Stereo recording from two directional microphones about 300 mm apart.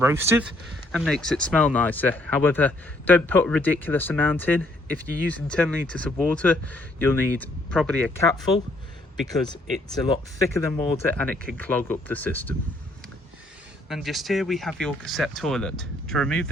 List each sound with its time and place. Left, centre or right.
0.0 s speech: centre
9.2 s speech: centre
13.8 s speech: centre